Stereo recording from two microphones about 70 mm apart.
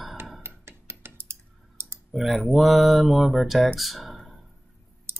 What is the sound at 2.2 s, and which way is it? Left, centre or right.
Speech, centre.